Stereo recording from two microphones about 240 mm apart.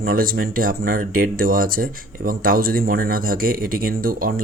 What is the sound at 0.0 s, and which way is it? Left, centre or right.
Speech, right.